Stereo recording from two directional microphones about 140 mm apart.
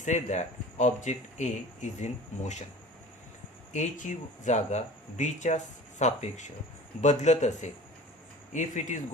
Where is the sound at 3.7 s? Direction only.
60° left (ahead or behind).